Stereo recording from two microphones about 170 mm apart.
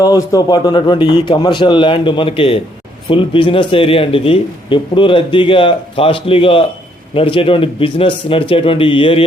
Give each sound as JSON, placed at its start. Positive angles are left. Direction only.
{"t": 0.0, "sound": "a man's voice", "side_deg": 20}